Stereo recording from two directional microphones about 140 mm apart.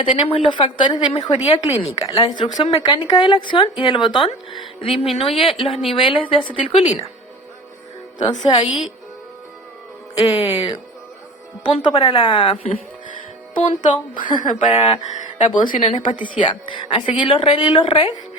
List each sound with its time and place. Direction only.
0.0 s speech: 35° left (ahead or behind)
2.0 s speech: 30° left (ahead or behind)
8.2 s speech: 30° left (ahead or behind)
10.2 s speech: 45° left (ahead or behind)
13.7 s speech: 65° left (ahead or behind)
14.6 s speech: 50° left (ahead or behind)
15.8 s speech: 40° left (ahead or behind)